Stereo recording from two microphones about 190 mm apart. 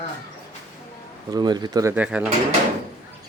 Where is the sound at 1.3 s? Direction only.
20° right (ahead or behind).